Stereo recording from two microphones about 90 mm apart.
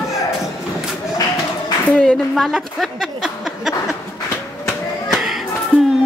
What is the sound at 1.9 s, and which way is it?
A woman's voice, 10° left (ahead or behind).